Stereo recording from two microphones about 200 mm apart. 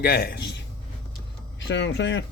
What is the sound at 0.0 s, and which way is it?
Speech, 50° left (ahead or behind).